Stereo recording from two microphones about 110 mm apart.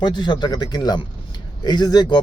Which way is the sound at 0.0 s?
40° left (ahead or behind).